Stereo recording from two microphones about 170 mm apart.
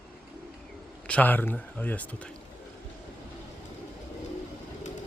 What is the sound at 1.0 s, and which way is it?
Speech, 10° left (ahead or behind).